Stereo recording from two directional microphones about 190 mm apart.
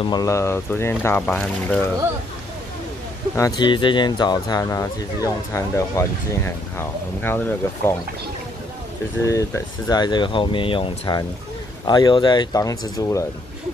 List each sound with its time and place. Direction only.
0.0 s speech: 20° left (ahead or behind)
3.3 s speech: 20° left (ahead or behind)
9.2 s speech: 15° left (ahead or behind)